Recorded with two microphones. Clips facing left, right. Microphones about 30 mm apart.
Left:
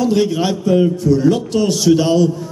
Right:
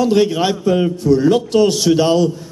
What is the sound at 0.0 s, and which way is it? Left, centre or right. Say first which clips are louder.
A man's voice: right 1 dB; centre.